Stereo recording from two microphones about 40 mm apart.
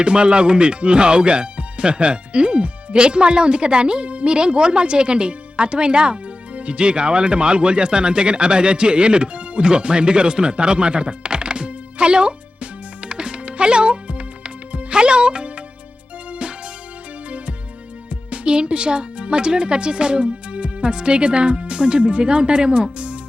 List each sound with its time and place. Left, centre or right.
0.0 s speech: right
13.1 s music: right
18.3 s speech: right